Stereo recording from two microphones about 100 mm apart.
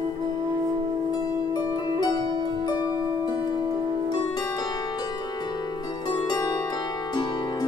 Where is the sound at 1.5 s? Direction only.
40° left (ahead or behind).